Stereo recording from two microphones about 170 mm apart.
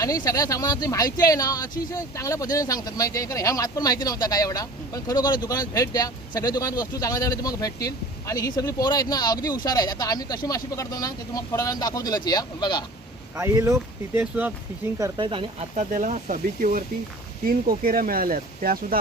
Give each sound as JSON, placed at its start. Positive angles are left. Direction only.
{"t": 0.0, "sound": "speech", "side_deg": 20}
{"t": 13.3, "sound": "speech", "side_deg": -15}
{"t": 14.9, "sound": "speech", "side_deg": -25}
{"t": 15.9, "sound": "speech", "side_deg": -45}